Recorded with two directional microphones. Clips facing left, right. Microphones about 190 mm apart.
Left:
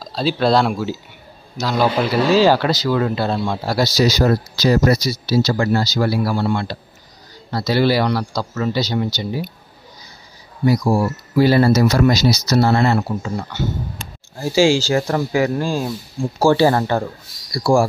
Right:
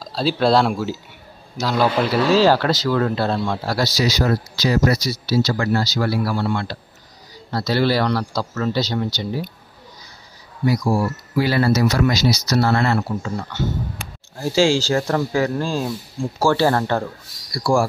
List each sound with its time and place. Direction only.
0.0 s speech: centre (ahead or behind)
4.0 s speech: 40° left (ahead or behind)
4.9 s speech: 15° left (ahead or behind)
7.5 s speech: 5° left (ahead or behind)
10.6 s speech: 30° left (ahead or behind)
12.4 s speech: 20° left (ahead or behind)